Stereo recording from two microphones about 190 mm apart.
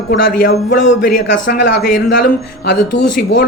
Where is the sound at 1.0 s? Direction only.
50° left (ahead or behind).